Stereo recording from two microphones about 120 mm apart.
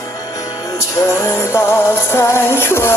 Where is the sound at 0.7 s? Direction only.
20° left (ahead or behind).